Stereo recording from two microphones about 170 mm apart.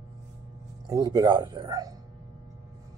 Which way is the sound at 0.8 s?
20° right (ahead or behind).